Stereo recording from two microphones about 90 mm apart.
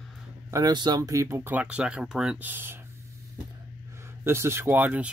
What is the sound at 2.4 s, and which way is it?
Speech, 20° right (ahead or behind).